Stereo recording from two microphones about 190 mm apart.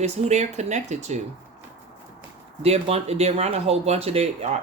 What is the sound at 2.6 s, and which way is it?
Speech, 35° right (ahead or behind).